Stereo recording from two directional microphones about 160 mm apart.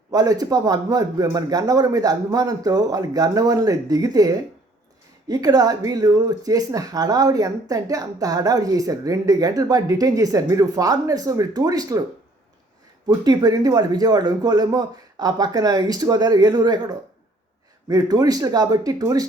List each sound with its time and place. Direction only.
0.1 s speech: 25° right (ahead or behind)
13.1 s speech: 25° right (ahead or behind)